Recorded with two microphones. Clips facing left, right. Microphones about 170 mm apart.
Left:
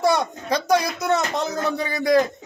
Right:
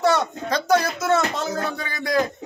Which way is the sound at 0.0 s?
10° left (ahead or behind).